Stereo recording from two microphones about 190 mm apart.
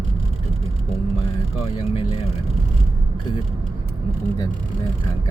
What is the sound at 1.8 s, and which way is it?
Speech, 30° left (ahead or behind).